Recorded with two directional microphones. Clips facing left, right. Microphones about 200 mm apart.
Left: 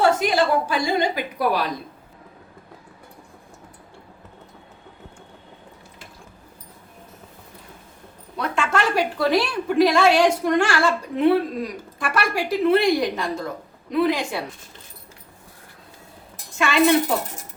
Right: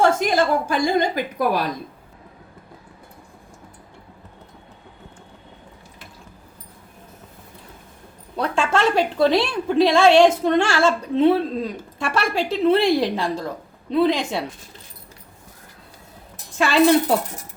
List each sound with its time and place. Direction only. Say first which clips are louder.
0.0 s a woman's voice: right 1 dB; 45° right (ahead or behind)
8.4 s a woman's voice: right 3 dB; 30° right (ahead or behind)
16.6 s a woman's voice: right 2 dB; 35° right (ahead or behind)